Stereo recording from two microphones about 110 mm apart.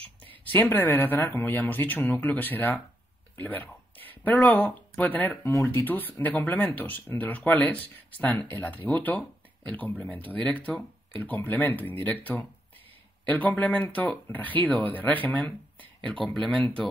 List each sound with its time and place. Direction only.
0.5 s speech: 20° left (ahead or behind)
3.3 s a sound: 15° left (ahead or behind)
4.6 s speech: 15° left (ahead or behind)
5.5 s speech: 25° left (ahead or behind)
16.3 s speech: centre (ahead or behind)